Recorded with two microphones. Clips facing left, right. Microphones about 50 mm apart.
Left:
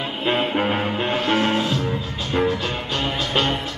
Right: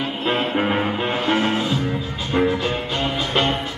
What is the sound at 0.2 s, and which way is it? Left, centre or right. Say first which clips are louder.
Music: left 1 dB; centre.